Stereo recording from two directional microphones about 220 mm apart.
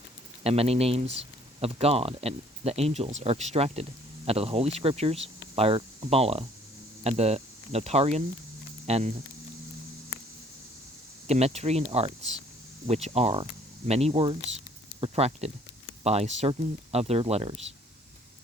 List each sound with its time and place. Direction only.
0.4 s speech: 25° right (ahead or behind)
11.3 s speech: 30° right (ahead or behind)